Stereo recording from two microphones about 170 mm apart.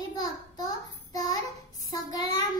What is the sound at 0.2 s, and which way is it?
Child singing, 20° left (ahead or behind).